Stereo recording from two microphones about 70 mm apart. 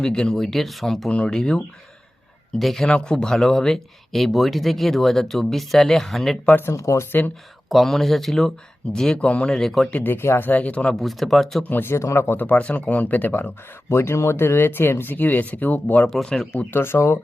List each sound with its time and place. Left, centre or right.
0.0 s speech: centre
1.1 s speech: centre
2.8 s speech: centre
6.7 s speech: left
7.7 s speech: centre
9.9 s speech: left
10.5 s speech: left
11.0 s speech: centre
11.7 s speech: left
13.9 s speech: left
16.0 s speech: centre
16.7 s speech: left